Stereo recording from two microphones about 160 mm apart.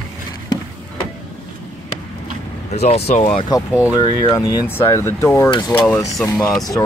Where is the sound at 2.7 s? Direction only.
40° left (ahead or behind).